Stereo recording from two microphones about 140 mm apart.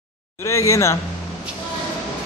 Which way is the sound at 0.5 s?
20° left (ahead or behind).